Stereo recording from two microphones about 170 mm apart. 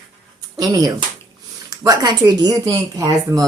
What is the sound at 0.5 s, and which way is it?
Speech, 20° right (ahead or behind).